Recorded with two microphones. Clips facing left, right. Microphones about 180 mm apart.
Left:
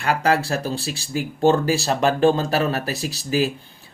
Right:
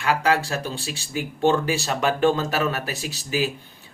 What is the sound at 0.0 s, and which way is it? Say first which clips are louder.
Speech: left 1 dB; 35° left (ahead or behind).